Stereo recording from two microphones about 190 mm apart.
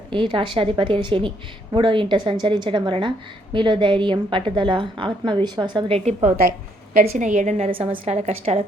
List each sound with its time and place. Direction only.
0.1 s a woman's voice: 25° right (ahead or behind)
7.1 s a woman's voice: 40° right (ahead or behind)